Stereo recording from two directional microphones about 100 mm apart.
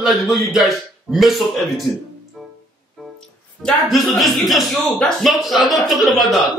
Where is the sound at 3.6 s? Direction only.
Centre (ahead or behind).